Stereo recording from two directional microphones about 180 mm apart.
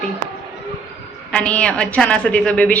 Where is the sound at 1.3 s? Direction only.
5° left (ahead or behind).